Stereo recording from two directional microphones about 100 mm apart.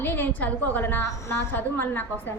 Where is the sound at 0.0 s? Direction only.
20° left (ahead or behind).